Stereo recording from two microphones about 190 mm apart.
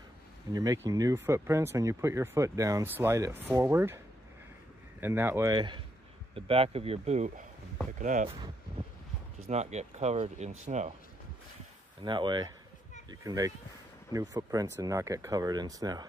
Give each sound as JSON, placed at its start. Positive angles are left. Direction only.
{"t": 0.5, "sound": "speech", "side_deg": -20}
{"t": 5.0, "sound": "speech", "side_deg": -10}
{"t": 9.5, "sound": "speech", "side_deg": -35}
{"t": 12.0, "sound": "speech", "side_deg": -25}